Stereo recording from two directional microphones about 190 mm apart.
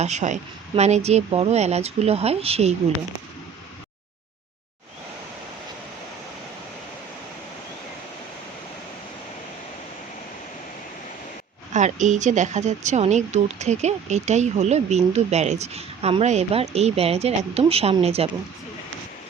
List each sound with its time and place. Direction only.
0.0 s speech: 40° right (ahead or behind)
11.7 s speech: 40° right (ahead or behind)